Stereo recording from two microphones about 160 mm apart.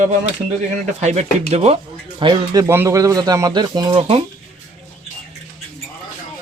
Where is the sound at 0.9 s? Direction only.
45° right (ahead or behind); by 4.2 s 25° right (ahead or behind).